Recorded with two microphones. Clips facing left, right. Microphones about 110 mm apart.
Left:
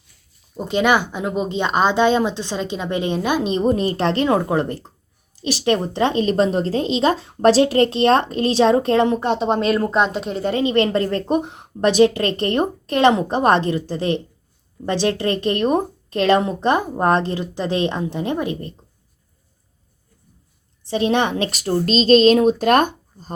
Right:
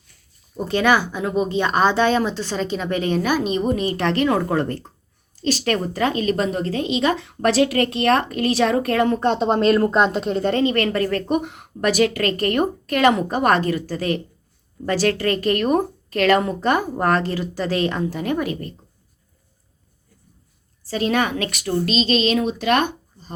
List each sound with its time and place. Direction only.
0.6 s speech: 20° left (ahead or behind)
9.2 s speech: 5° left (ahead or behind)
10.6 s speech: 20° left (ahead or behind)
20.8 s a woman's voice: 25° left (ahead or behind); by 23.3 s 45° left (ahead or behind)